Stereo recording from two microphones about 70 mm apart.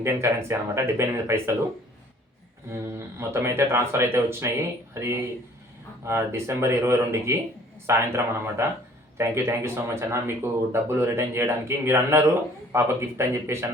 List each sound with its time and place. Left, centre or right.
0.0 s speech: right
2.6 s speech: right